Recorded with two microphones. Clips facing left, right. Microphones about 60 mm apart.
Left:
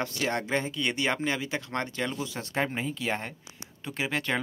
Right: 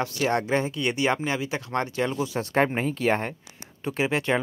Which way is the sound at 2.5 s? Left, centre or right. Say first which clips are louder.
Right 6 dB; right.